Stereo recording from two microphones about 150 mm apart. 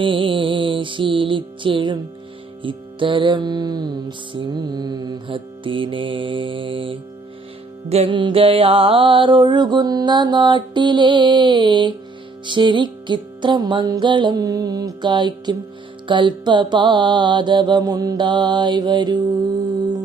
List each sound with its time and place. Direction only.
0.0 s music: 35° right (ahead or behind)